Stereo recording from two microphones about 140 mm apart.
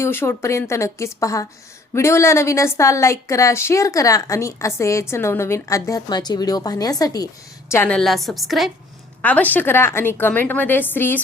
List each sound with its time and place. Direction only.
0.0 s a woman's voice: 15° left (ahead or behind)
7.7 s a woman's voice: 15° left (ahead or behind)
7.9 s a woman's voice: centre (ahead or behind)
9.2 s a woman's voice: 10° left (ahead or behind)